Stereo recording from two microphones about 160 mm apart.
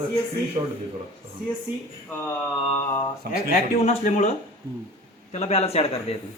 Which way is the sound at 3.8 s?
45° left (ahead or behind).